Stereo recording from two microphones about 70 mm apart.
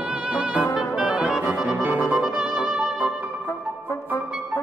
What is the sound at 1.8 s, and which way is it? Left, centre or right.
Music, right.